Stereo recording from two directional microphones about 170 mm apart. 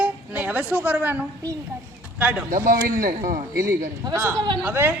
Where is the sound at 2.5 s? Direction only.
50° right (ahead or behind).